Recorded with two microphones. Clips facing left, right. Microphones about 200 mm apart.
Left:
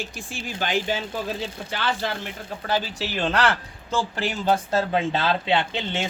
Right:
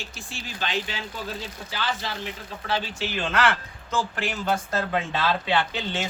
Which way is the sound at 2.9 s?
35° left (ahead or behind).